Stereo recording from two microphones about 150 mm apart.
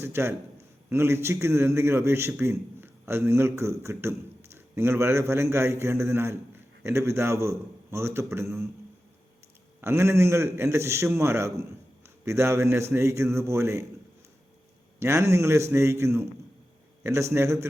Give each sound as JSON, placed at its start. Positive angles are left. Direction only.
{"t": 0.0, "sound": "a man's voice", "side_deg": -15}
{"t": 9.8, "sound": "a man's voice", "side_deg": -20}
{"t": 15.0, "sound": "a man's voice", "side_deg": -20}